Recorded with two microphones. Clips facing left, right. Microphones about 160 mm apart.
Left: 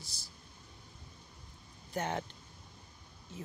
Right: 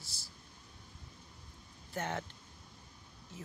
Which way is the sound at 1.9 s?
20° left (ahead or behind).